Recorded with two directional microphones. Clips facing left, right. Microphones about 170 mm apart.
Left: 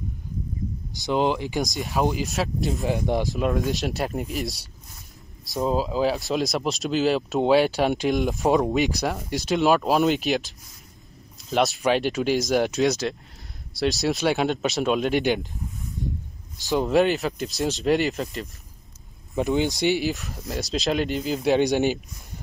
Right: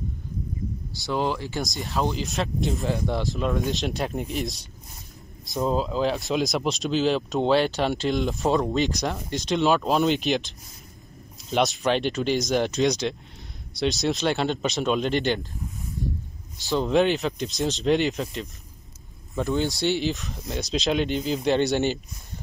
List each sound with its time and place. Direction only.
0.9 s speech: 20° left (ahead or behind); by 2.8 s 5° left (ahead or behind)
2.8 s speech: 15° left (ahead or behind)
5.5 s speech: 5° left (ahead or behind)
8.7 s speech: 5° left (ahead or behind)
16.6 s speech: 10° left (ahead or behind)
19.3 s speech: 15° left (ahead or behind)
20.1 s speech: centre (ahead or behind)